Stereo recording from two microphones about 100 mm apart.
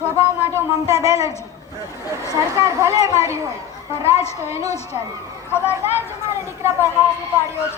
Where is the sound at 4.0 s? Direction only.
90° left.